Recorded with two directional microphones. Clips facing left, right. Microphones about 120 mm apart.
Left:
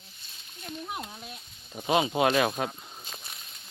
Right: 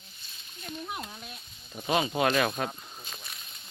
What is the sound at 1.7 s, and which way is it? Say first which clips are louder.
Speech: left 2 dB; 15° left (ahead or behind).